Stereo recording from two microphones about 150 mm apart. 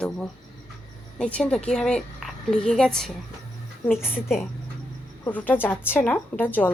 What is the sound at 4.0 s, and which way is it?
Speech, 15° left (ahead or behind).